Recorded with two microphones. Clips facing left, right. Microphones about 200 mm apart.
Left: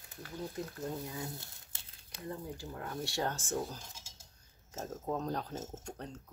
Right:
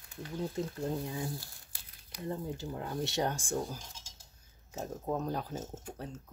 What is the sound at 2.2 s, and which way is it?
Speech, 25° right (ahead or behind).